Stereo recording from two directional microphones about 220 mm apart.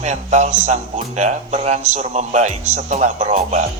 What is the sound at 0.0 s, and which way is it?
Speech, 30° right (ahead or behind).